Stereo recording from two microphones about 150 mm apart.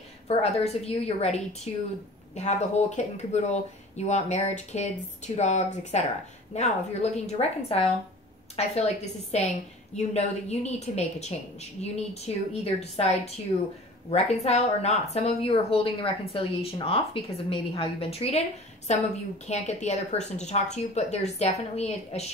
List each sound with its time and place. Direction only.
0.3 s speech: 40° left (ahead or behind)